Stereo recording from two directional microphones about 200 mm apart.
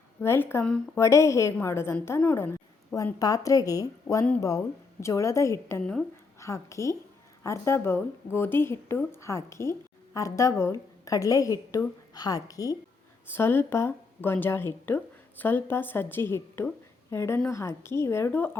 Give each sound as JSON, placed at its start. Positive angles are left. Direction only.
{"t": 0.2, "sound": "speech", "side_deg": 10}
{"t": 6.4, "sound": "speech", "side_deg": 15}